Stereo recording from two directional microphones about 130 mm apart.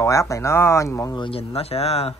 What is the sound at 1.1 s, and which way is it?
Speech, 45° left (ahead or behind).